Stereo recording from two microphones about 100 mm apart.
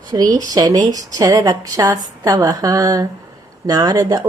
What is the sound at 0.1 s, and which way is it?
Speech, 40° right (ahead or behind).